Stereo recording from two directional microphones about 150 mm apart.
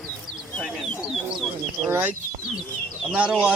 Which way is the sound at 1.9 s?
10° right (ahead or behind).